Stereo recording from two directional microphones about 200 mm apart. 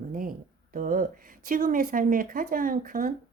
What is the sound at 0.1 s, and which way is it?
Speech, 45° right (ahead or behind).